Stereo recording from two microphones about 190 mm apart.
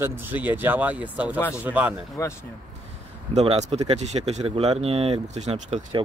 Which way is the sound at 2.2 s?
15° left (ahead or behind).